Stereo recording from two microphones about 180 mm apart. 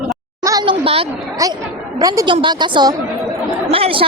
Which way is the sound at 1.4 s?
20° right (ahead or behind).